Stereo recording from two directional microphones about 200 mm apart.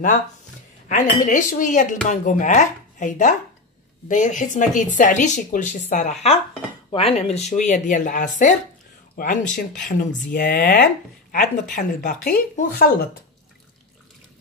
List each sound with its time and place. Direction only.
0.8 s speech: 40° left (ahead or behind)